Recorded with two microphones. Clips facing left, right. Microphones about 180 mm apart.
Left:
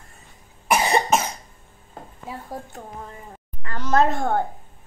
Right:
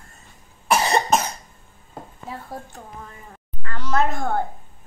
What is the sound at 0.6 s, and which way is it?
Cough, 10° left (ahead or behind).